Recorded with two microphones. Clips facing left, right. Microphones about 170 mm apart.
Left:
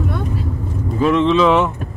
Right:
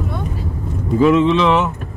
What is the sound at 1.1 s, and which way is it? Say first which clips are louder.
Speech: left 1 dB; 5° right (ahead or behind).